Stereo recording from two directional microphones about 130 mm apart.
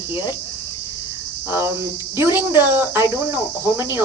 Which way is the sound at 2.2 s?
15° right (ahead or behind).